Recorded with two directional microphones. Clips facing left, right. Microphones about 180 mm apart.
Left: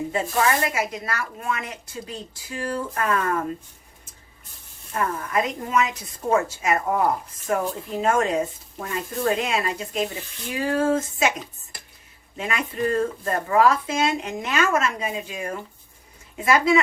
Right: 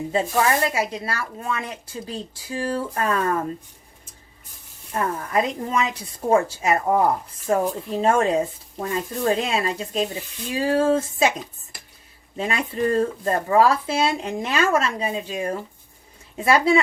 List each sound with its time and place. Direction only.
0.1 s speech: 30° right (ahead or behind)
4.9 s speech: 30° right (ahead or behind)
12.4 s speech: 30° right (ahead or behind)